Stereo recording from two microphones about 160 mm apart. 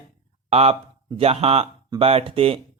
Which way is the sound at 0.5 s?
40° right (ahead or behind).